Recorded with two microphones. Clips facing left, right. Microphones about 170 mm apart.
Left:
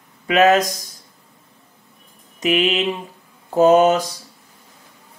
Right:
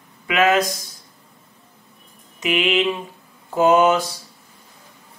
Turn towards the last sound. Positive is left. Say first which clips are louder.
# left 2 dB
turn(degrees=40)  # may be behind; listen again after turning